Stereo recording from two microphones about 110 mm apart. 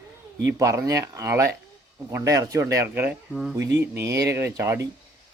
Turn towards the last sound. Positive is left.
turn(degrees=-25)  # may be behind; listen again after turning